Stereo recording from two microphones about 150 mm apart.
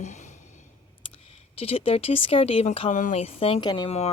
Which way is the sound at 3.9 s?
45° left (ahead or behind).